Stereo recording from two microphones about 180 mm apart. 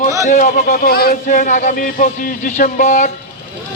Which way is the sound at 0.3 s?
40° left (ahead or behind).